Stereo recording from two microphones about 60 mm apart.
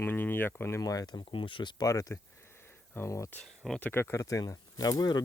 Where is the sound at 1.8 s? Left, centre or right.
Left.